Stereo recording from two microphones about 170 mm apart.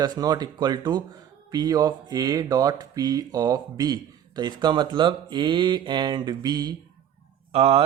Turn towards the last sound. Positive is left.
turn(degrees=-35)  # may be behind; listen again after turning